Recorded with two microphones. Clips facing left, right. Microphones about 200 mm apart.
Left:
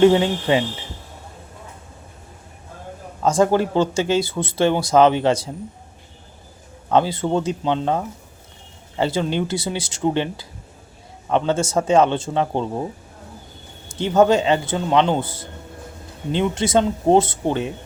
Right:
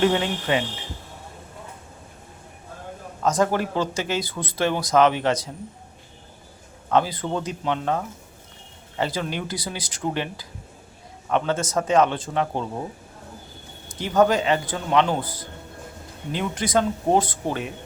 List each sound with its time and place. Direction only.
0.0 s speech: 25° left (ahead or behind)
3.2 s speech: 30° left (ahead or behind)
6.9 s speech: 25° left (ahead or behind)
13.8 s speech: 25° left (ahead or behind)